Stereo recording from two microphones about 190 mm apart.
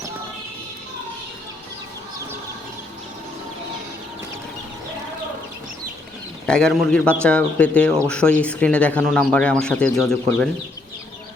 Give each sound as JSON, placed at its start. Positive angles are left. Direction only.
{"t": 6.4, "sound": "speech", "side_deg": 5}